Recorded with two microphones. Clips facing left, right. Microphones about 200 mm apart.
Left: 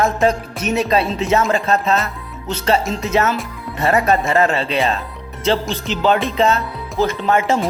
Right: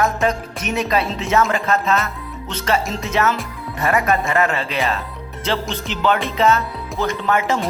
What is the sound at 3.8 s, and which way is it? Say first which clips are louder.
Speech: left 3 dB; 30° left (ahead or behind).